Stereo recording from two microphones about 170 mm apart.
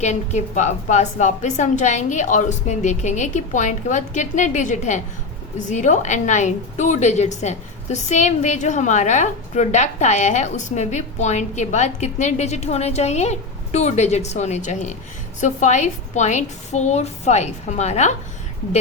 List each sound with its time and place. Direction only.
0.0 s a woman's voice: 45° left (ahead or behind)